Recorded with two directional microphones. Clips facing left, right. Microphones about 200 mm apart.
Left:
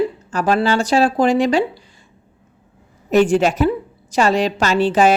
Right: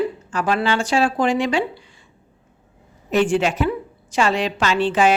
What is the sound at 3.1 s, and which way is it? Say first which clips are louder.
A woman's voice: left 4 dB; 40° left (ahead or behind).